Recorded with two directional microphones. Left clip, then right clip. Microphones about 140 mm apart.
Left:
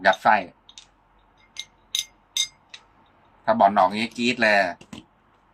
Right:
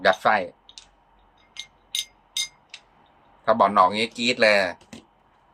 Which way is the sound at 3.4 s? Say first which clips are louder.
Even; 30° right (ahead or behind).